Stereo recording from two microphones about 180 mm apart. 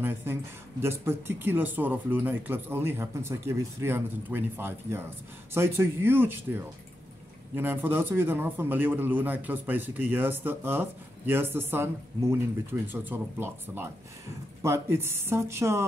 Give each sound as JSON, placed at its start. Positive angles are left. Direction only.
{"t": 0.0, "sound": "speech", "side_deg": -15}